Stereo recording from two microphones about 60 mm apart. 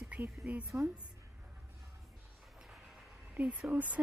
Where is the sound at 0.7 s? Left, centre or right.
Right.